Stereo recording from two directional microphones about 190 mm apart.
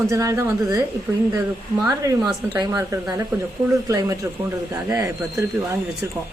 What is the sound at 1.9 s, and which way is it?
A woman's voice, 20° right (ahead or behind).